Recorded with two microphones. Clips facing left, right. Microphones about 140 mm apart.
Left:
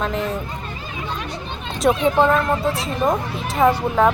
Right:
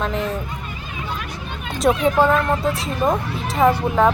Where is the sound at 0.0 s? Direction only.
Centre (ahead or behind).